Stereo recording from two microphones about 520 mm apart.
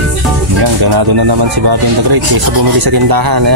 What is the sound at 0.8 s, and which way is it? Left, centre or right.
Speech, right.